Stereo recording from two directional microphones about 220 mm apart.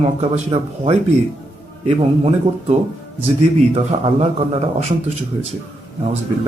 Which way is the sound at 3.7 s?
25° right (ahead or behind).